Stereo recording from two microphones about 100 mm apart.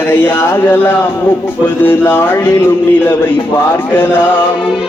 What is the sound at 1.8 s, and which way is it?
Speech, 20° left (ahead or behind).